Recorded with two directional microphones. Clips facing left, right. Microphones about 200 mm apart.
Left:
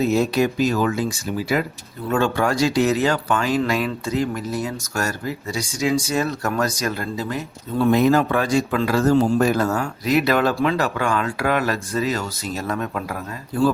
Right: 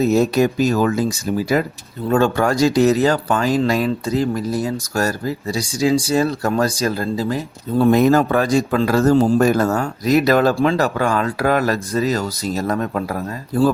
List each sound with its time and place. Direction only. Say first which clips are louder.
0.0 s speech: right 3 dB; 40° right (ahead or behind)